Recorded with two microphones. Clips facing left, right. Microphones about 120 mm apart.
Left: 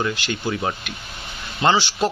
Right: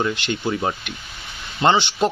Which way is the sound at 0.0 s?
10° right (ahead or behind).